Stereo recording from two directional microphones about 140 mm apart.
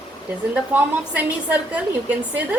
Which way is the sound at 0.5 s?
10° right (ahead or behind).